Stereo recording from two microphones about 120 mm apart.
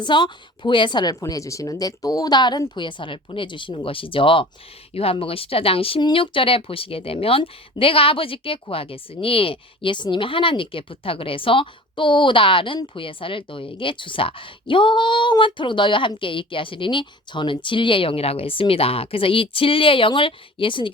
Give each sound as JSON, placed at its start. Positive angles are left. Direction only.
{"t": 0.0, "sound": "a woman's voice", "side_deg": 40}
{"t": 1.2, "sound": "a woman's voice", "side_deg": 25}